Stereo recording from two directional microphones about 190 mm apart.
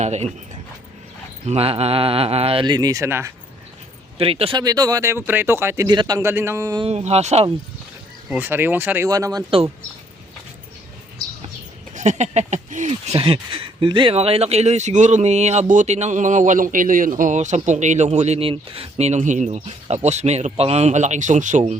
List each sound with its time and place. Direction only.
0.0 s speech: 35° right (ahead or behind)
1.5 s speech: 30° right (ahead or behind); by 3.3 s 15° right (ahead or behind)
4.2 s speech: 30° right (ahead or behind)
6.8 s speech: 35° right (ahead or behind)
8.3 s speech: 10° right (ahead or behind)
11.9 s speech: 40° right (ahead or behind)